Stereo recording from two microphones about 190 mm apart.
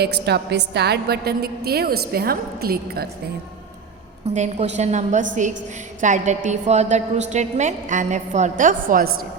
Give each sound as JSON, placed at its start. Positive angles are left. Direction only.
{"t": 0.0, "sound": "a woman's voice", "side_deg": -60}
{"t": 4.4, "sound": "a woman's voice", "side_deg": -35}